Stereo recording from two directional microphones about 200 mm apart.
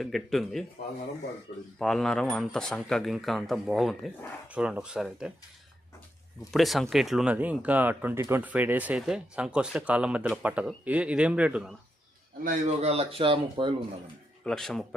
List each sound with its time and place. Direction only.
0.0 s speech: centre (ahead or behind)
1.8 s speech: centre (ahead or behind)
6.5 s speech: centre (ahead or behind)
12.4 s speech: 40° right (ahead or behind)
14.4 s speech: centre (ahead or behind)